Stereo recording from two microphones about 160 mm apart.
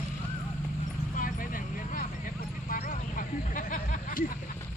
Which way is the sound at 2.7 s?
60° left (ahead or behind).